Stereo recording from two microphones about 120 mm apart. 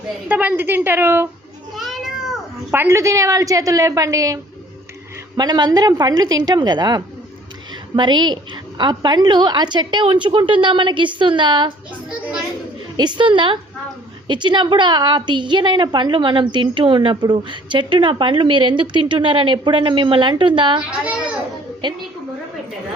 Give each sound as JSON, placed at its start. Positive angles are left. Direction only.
{"t": 0.3, "sound": "a woman's voice", "side_deg": -15}
{"t": 1.7, "sound": "cat", "side_deg": 0}
{"t": 2.7, "sound": "a woman's voice", "side_deg": -20}
{"t": 5.4, "sound": "a woman's voice", "side_deg": -35}
{"t": 13.0, "sound": "a woman's voice", "side_deg": -40}
{"t": 21.0, "sound": "a woman's voice", "side_deg": -5}